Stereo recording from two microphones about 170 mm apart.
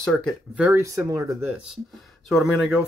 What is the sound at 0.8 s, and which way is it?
Speech, 20° right (ahead or behind).